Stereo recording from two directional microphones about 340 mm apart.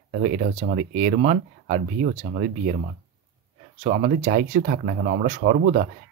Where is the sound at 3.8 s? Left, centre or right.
Right.